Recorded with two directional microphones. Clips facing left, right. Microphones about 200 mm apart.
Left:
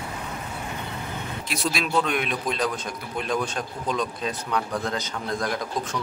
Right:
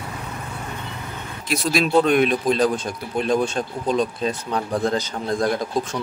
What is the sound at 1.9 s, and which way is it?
A man's voice, 35° right (ahead or behind).